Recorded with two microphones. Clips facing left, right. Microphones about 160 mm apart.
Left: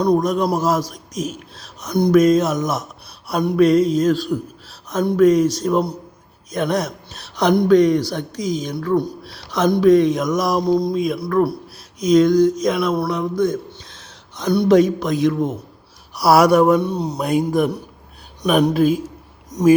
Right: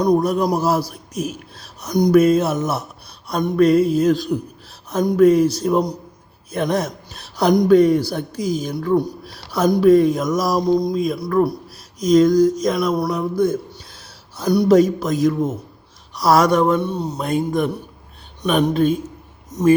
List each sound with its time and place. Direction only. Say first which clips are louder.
0.0 s speech: even; 10° right (ahead or behind)
3.2 s speech: even; 5° left (ahead or behind)
6.5 s a sound: even; 10° right (ahead or behind)
7.7 s speech: right 1 dB; 5° right (ahead or behind)
9.8 s a sound: even; 5° right (ahead or behind)
16.1 s speech: left 2 dB; 10° left (ahead or behind)
16.9 s speech: left 1 dB; 35° left (ahead or behind)
17.2 s speech: left 2 dB; 10° left (ahead or behind)
18.4 s a sound: left 1 dB; 10° left (ahead or behind)
19.5 s speech: left 1 dB; 15° left (ahead or behind)